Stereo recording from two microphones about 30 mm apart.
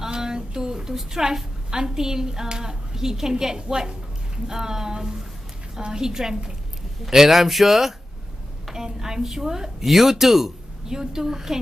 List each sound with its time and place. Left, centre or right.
0.1 s a woman's voice: right